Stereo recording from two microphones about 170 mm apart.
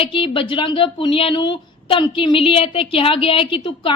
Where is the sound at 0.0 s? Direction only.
30° left (ahead or behind).